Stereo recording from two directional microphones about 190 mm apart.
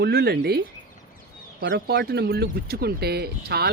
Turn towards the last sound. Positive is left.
turn(degrees=-55)  # may be behind; listen again after turning